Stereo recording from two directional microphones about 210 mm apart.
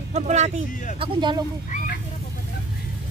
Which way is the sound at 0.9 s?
20° right (ahead or behind).